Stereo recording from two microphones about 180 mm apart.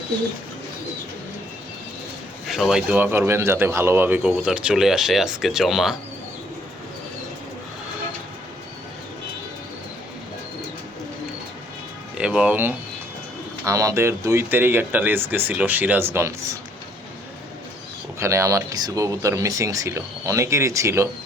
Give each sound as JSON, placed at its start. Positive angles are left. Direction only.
{"t": 2.5, "sound": "a man's voice", "side_deg": 0}
{"t": 12.1, "sound": "speech", "side_deg": -5}
{"t": 18.2, "sound": "speech", "side_deg": -15}